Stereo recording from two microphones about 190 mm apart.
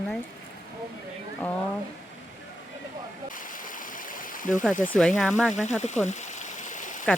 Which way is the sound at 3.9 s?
45° left (ahead or behind).